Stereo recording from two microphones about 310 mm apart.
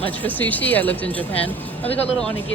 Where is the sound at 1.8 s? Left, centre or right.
Centre.